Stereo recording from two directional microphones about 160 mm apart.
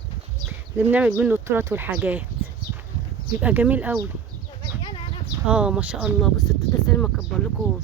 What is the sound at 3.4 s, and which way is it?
Speech, 10° right (ahead or behind).